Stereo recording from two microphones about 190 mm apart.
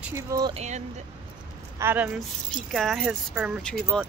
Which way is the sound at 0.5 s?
35° right (ahead or behind).